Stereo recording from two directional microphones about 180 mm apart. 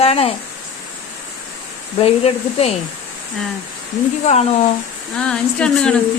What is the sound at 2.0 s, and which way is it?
Speech, 35° left (ahead or behind).